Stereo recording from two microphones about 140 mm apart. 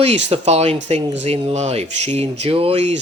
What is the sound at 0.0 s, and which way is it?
Speech, 50° right (ahead or behind).